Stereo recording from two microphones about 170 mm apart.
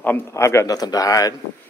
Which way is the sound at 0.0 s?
15° left (ahead or behind).